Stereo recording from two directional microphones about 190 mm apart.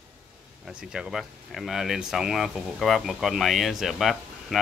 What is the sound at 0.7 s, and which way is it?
Speech, 5° right (ahead or behind).